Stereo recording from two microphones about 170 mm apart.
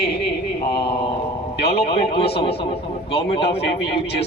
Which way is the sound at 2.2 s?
35° left (ahead or behind).